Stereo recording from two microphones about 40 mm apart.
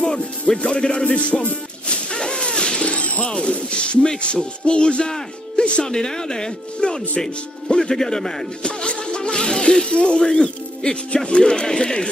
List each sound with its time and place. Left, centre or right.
0.0 s music: centre
1.0 s music: left
2.0 s a sound: left
3.3 s music: left
5.6 s speech: left
8.6 s music: left